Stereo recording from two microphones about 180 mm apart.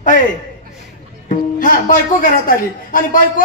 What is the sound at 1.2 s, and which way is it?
A man's voice, 50° left (ahead or behind).